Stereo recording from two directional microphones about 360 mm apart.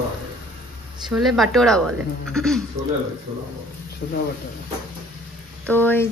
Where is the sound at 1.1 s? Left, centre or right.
Centre.